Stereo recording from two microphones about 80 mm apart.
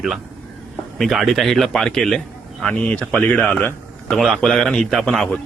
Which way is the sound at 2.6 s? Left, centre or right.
Centre.